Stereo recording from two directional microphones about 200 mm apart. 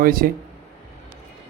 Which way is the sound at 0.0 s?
45° right (ahead or behind).